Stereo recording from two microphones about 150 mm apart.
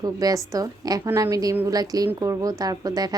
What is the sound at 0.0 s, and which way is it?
A woman's voice, 25° right (ahead or behind).